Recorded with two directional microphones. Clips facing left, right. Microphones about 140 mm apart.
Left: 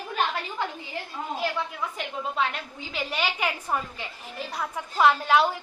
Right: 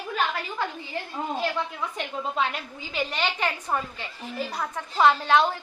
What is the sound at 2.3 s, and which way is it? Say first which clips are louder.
A woman's voice: even; centre (ahead or behind).